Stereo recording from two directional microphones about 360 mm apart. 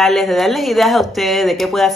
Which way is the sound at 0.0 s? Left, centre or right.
Centre.